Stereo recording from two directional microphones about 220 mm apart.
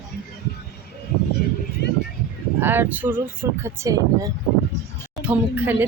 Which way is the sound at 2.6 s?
10° right (ahead or behind).